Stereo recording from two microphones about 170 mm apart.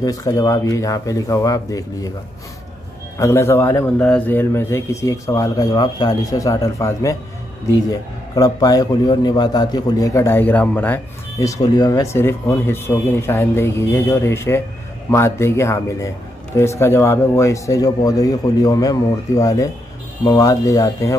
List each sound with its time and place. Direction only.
0.0 s speech: 20° left (ahead or behind)
3.2 s a man's voice: 15° left (ahead or behind)